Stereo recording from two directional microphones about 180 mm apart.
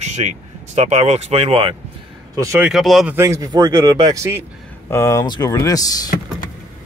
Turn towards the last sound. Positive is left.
turn(degrees=20)  # may be behind; listen again after turning